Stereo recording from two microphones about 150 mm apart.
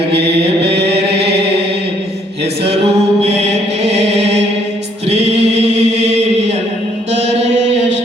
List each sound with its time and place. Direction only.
0.1 s mantra: 90° right
3.8 s chant: 45° right (ahead or behind)
7.1 s mantra: 50° right (ahead or behind)